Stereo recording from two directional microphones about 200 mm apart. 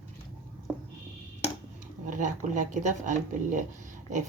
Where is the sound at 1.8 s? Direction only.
40° right (ahead or behind).